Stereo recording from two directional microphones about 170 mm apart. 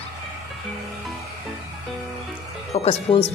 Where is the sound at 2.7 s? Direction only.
35° left (ahead or behind).